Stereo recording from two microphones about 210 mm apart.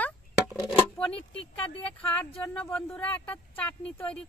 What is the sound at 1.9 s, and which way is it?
Speech, 5° left (ahead or behind).